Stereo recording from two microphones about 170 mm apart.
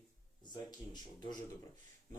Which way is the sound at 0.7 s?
25° left (ahead or behind).